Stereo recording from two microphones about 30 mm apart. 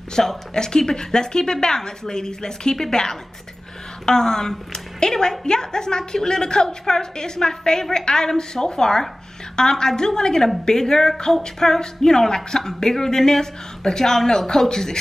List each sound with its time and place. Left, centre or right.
0.2 s a woman's voice: centre